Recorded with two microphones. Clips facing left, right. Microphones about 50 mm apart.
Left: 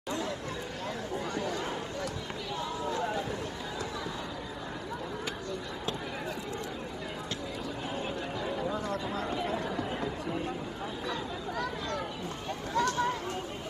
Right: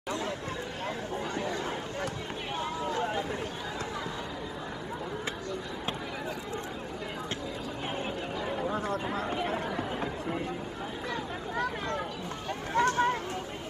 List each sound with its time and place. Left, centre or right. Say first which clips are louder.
1.1 s chatter: left 1 dB; right
2.8 s chatter: right 1 dB; right
8.4 s chatter: right 2 dB; right
11.1 s a sound: right 1 dB; right
12.7 s chatter: right 3 dB; right